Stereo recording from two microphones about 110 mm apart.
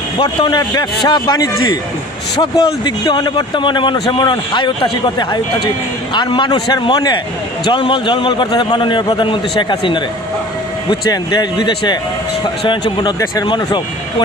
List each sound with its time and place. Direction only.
0.2 s a man's voice: 45° left (ahead or behind)
2.4 s a man's voice: 50° left (ahead or behind)
12.6 s speech: 45° left (ahead or behind)